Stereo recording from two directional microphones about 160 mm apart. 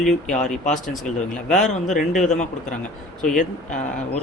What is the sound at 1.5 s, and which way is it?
Speech, 50° left (ahead or behind).